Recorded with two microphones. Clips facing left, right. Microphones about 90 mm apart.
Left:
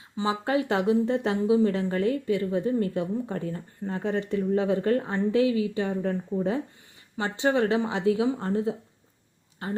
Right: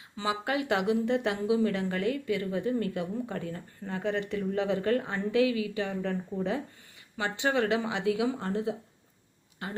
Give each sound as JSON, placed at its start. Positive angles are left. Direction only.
{"t": 0.2, "sound": "speech", "side_deg": 30}